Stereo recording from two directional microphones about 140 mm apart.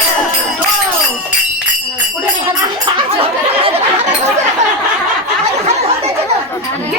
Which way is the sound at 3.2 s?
40° right (ahead or behind).